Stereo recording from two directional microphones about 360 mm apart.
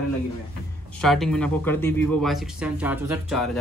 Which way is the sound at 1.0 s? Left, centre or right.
Centre.